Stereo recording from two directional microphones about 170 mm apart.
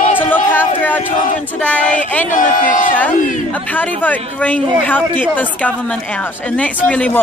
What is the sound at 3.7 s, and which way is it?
Speech, 10° left (ahead or behind).